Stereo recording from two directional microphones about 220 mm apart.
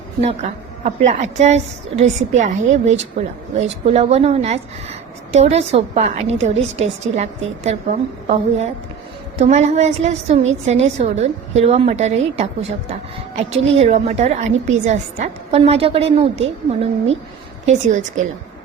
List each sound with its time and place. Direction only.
0.2 s a woman's voice: 30° right (ahead or behind)
13.5 s a woman's voice: 30° right (ahead or behind)